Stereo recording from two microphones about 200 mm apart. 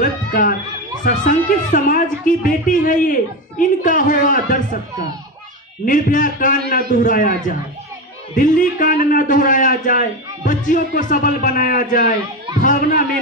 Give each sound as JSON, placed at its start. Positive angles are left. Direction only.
{"t": 0.0, "sound": "speech", "side_deg": 45}
{"t": 5.9, "sound": "a man's voice", "side_deg": 40}